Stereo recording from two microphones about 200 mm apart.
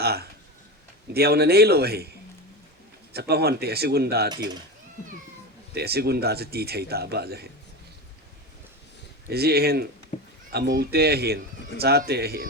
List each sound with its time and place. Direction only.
0.0 s speech: 50° right (ahead or behind)
3.1 s speech: 55° right (ahead or behind)
5.7 s speech: 50° right (ahead or behind)
9.3 s speech: 50° right (ahead or behind)